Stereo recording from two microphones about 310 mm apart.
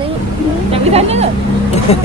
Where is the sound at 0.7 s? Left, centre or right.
Centre.